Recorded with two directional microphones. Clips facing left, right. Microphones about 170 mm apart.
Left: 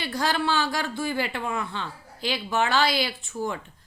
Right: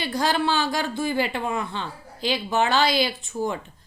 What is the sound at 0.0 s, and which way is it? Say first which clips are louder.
A woman's voice: right 3 dB; 15° right (ahead or behind).